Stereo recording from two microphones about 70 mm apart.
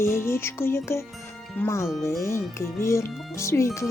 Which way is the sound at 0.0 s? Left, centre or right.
Left.